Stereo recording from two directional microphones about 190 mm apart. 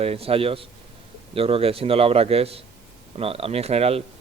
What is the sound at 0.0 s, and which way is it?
Speech, 30° right (ahead or behind).